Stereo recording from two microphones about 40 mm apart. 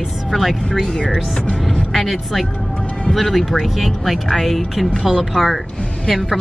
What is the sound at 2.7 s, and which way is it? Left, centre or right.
Music, left.